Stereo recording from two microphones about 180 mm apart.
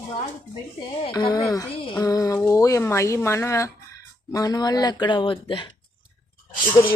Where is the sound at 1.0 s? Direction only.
25° left (ahead or behind).